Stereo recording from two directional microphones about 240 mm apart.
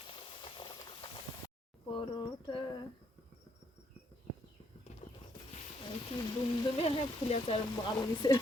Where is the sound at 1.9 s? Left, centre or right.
Left.